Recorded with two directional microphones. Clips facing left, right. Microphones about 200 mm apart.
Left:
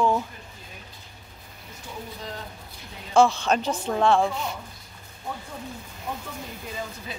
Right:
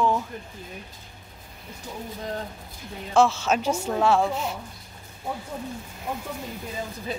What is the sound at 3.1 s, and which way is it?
A woman's voice, 5° right (ahead or behind).